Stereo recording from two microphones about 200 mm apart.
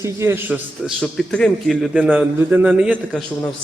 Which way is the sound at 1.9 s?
5° right (ahead or behind).